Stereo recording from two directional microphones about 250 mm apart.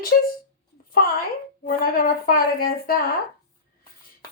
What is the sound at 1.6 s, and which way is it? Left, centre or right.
A woman's voice, left.